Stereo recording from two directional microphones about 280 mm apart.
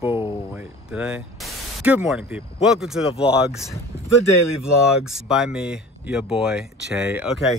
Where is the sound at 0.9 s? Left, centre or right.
Centre.